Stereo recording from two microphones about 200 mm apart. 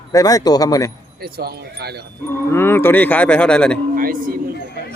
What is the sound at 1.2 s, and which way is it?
Speech, 50° right (ahead or behind).